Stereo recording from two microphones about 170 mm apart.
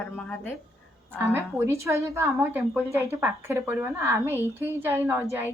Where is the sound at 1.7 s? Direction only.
15° right (ahead or behind).